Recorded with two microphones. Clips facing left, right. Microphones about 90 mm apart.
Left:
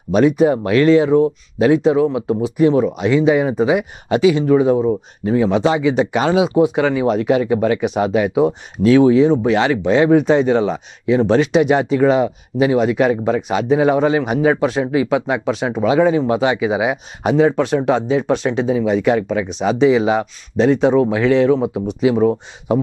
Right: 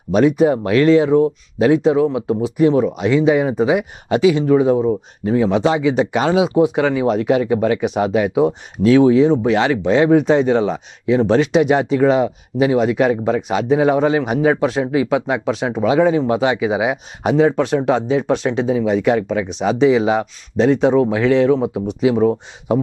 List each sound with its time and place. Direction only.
0.1 s speech: 15° left (ahead or behind)